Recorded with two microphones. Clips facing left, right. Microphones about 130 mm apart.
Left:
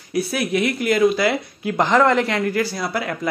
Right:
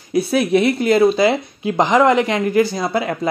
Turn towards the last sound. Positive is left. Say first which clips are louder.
# right 5 dB
turn(degrees=-25)  # may be behind; listen again after turning